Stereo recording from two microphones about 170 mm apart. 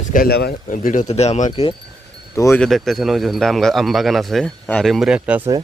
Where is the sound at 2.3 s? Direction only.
20° left (ahead or behind).